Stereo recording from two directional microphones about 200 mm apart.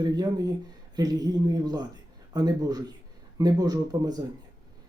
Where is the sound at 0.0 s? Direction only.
20° right (ahead or behind).